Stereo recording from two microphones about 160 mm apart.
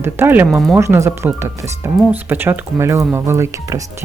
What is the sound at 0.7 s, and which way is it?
Speech, 15° right (ahead or behind).